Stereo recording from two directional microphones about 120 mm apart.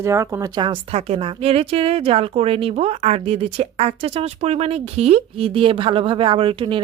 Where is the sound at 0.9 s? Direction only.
55° right (ahead or behind).